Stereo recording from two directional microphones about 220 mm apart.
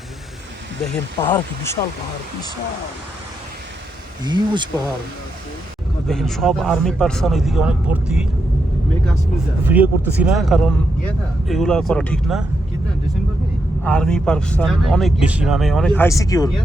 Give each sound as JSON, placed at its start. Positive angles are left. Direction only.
{"t": 0.9, "sound": "speech", "side_deg": 10}
{"t": 4.2, "sound": "speech", "side_deg": -20}
{"t": 6.1, "sound": "speech", "side_deg": 0}
{"t": 9.6, "sound": "speech", "side_deg": -5}
{"t": 13.8, "sound": "speech", "side_deg": 5}